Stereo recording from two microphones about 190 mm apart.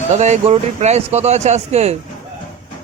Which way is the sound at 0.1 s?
35° right (ahead or behind).